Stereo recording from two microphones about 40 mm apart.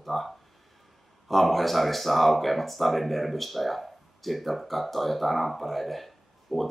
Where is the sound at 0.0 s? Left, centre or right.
Centre.